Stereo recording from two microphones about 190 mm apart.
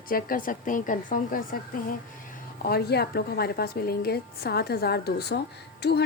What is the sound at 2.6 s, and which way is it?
A woman's voice, 55° left (ahead or behind).